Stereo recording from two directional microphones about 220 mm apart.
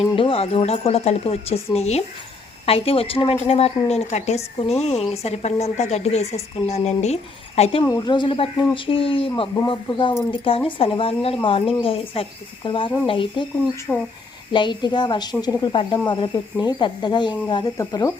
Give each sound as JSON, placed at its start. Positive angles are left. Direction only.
{"t": 0.2, "sound": "speech", "side_deg": 25}
{"t": 13.9, "sound": "speech", "side_deg": 5}
{"t": 14.5, "sound": "speech", "side_deg": 20}